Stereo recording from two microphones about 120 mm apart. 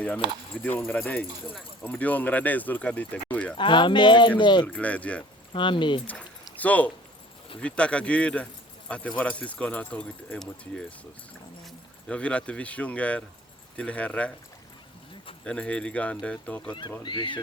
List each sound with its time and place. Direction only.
0.6 s speech: 15° left (ahead or behind)
3.6 s speech: 40° left (ahead or behind)
4.6 s speech: 10° left (ahead or behind)
5.5 s speech: 40° left (ahead or behind)
6.1 s a sound: 10° left (ahead or behind)
7.6 s speech: 10° left (ahead or behind)
15.4 s speech: 10° left (ahead or behind)
17.0 s speech: 40° left (ahead or behind)